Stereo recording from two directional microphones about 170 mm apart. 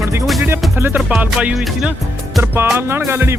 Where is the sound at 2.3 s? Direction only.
10° right (ahead or behind).